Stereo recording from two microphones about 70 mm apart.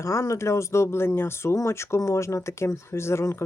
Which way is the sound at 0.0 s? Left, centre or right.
Left.